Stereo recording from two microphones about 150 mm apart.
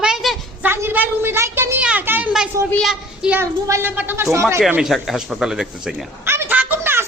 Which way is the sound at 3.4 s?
20° right (ahead or behind).